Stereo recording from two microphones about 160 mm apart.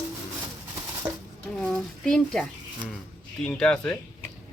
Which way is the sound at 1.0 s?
30° right (ahead or behind).